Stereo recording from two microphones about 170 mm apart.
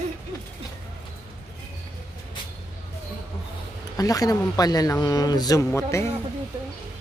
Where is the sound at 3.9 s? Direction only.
20° left (ahead or behind).